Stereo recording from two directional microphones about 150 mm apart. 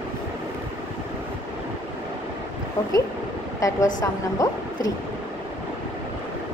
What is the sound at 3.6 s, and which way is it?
A woman's voice, 20° left (ahead or behind).